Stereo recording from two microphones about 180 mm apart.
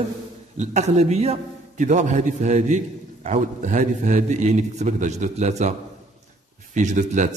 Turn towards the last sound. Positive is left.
turn(degrees=-45)  # may be behind; listen again after turning